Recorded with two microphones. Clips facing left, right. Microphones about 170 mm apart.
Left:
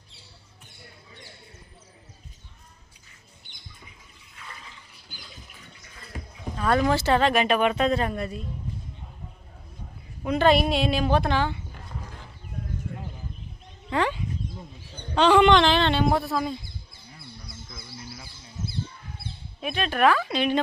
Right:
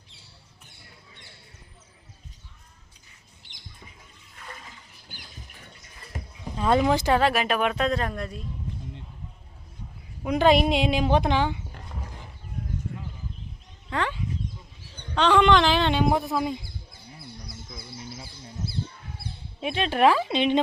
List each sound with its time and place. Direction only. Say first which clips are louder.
4.4 s a sound: right 2 dB; 45° right (ahead or behind)
6.6 s speech: right 1 dB; 20° right (ahead or behind); by 8.4 s 5° left (ahead or behind)
10.2 s a woman's voice: right 1 dB; 15° right (ahead or behind)
13.9 s a sound: left 3 dB; 10° left (ahead or behind); by 16.6 s 15° right (ahead or behind)
17.7 s bird: right 2 dB; 20° right (ahead or behind)
19.6 s speech: right 1 dB; 25° right (ahead or behind)